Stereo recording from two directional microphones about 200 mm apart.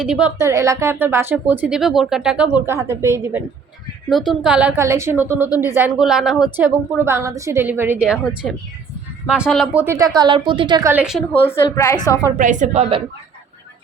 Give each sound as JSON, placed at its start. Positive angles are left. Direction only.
{"t": 0.0, "sound": "speech", "side_deg": -5}
{"t": 0.3, "sound": "speech", "side_deg": -15}
{"t": 9.8, "sound": "a woman's voice", "side_deg": -15}
{"t": 10.9, "sound": "speech", "side_deg": -5}
{"t": 11.4, "sound": "a woman's voice", "side_deg": 15}
{"t": 12.4, "sound": "a woman's voice", "side_deg": -40}